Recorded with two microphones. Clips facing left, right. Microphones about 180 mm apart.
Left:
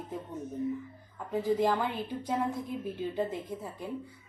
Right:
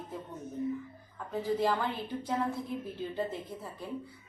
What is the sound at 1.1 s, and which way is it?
A woman's voice, 15° left (ahead or behind).